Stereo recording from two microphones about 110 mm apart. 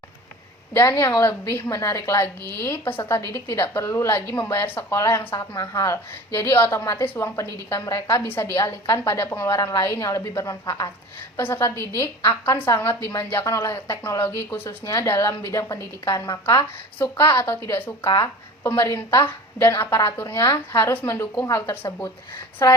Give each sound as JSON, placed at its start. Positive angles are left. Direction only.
{"t": 0.7, "sound": "a woman's voice", "side_deg": 25}
{"t": 22.6, "sound": "speech", "side_deg": 35}